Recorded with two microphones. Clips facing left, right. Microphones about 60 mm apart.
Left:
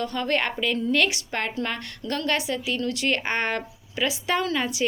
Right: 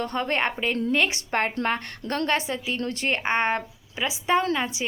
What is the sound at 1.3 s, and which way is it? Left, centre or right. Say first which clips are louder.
A woman's voice: right 4 dB; right.